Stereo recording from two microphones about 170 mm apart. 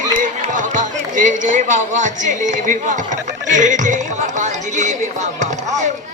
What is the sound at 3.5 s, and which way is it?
Speech, 45° right (ahead or behind).